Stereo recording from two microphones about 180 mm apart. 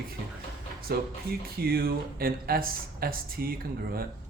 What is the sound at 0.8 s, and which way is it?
Speech, 55° right (ahead or behind).